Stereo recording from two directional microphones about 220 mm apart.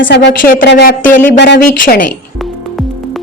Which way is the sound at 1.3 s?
50° left (ahead or behind).